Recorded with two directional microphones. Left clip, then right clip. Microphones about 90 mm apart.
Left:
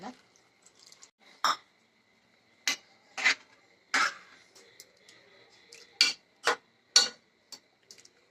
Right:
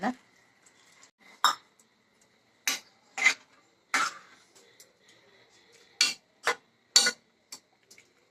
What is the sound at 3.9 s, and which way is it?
Cough, 35° left (ahead or behind).